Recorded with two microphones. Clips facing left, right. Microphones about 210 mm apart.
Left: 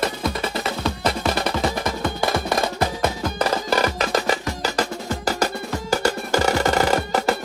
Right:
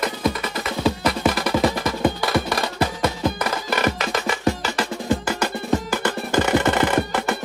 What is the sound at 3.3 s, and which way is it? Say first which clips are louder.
Music: left 3 dB; 35° left (ahead or behind).